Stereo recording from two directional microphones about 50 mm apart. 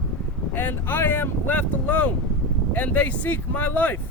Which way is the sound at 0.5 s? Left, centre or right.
Left.